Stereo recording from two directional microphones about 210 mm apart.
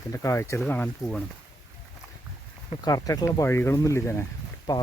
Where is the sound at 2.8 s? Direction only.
15° left (ahead or behind).